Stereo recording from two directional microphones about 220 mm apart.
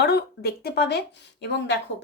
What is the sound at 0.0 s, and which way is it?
Speech, 50° left (ahead or behind).